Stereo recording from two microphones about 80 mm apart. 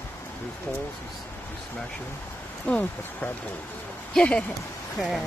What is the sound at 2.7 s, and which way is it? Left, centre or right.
Speech, centre.